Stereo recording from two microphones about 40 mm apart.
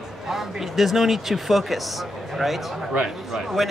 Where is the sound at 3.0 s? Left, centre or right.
Centre.